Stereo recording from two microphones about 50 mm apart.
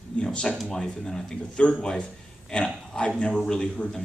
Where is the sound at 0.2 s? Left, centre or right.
Centre.